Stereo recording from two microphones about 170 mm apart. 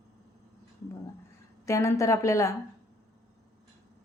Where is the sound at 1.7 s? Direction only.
15° left (ahead or behind).